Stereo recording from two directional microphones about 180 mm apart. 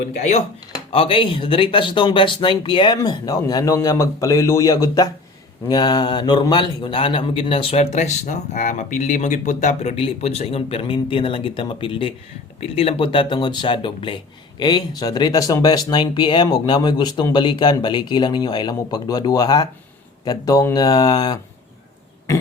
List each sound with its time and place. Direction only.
0.2 s a man's voice: 40° left (ahead or behind); by 21.3 s 25° left (ahead or behind)